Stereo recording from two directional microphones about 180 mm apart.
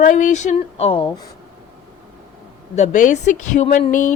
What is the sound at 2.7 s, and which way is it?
A woman's voice, 40° left (ahead or behind).